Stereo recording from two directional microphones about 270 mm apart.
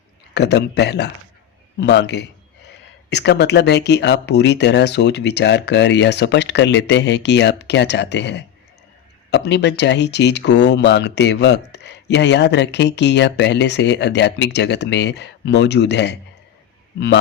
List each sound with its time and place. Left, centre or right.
0.3 s speech: left